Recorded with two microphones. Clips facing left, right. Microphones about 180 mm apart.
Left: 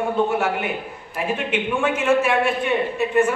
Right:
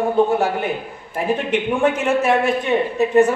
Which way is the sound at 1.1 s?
35° right (ahead or behind).